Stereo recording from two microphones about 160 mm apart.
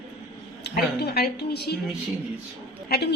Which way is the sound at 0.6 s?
85° left.